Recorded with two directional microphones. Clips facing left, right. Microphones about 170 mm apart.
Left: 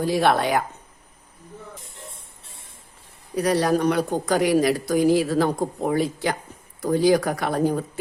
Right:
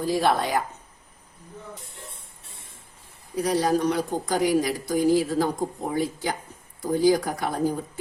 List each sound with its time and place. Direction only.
0.0 s speech: 70° left (ahead or behind)
3.3 s speech: 70° left (ahead or behind)